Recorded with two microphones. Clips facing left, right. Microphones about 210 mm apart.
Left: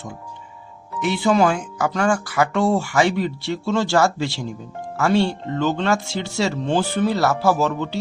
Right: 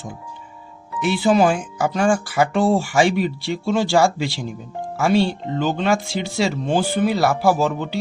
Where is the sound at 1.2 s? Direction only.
25° right (ahead or behind).